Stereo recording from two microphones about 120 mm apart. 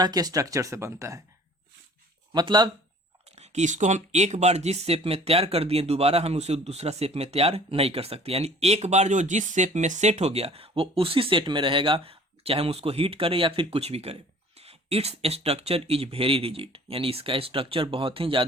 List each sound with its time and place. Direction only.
0.0 s speech: 35° right (ahead or behind)
2.3 s speech: 40° right (ahead or behind)
3.3 s speech: 70° right (ahead or behind); by 18.4 s 50° right (ahead or behind)